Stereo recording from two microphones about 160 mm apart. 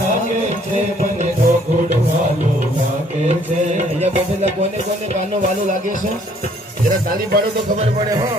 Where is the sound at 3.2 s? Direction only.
45° right (ahead or behind).